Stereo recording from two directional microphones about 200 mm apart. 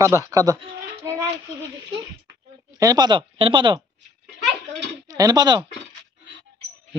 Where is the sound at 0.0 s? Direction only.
15° right (ahead or behind).